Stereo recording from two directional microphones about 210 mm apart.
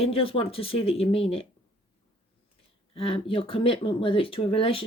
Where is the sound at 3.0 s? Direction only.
25° left (ahead or behind).